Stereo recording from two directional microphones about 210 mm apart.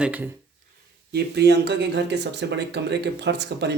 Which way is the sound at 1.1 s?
50° right (ahead or behind).